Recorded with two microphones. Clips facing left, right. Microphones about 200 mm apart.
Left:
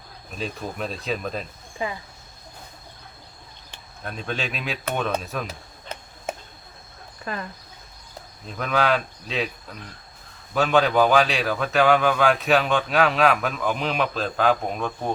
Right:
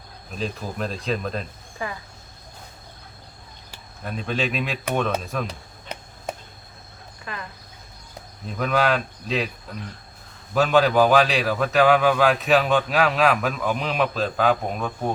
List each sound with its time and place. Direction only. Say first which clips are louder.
0.3 s a man's voice: right 1 dB; centre (ahead or behind)
1.8 s speech: left 2 dB; 20° left (ahead or behind)
4.0 s a man's voice: right 4 dB; centre (ahead or behind)
7.3 s speech: left 4 dB; 40° left (ahead or behind)
8.5 s a man's voice: right 1 dB; centre (ahead or behind)